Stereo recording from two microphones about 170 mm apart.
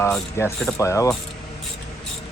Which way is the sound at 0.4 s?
15° left (ahead or behind).